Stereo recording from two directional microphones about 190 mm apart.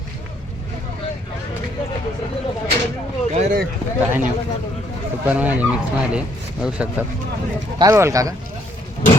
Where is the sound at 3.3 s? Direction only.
35° right (ahead or behind).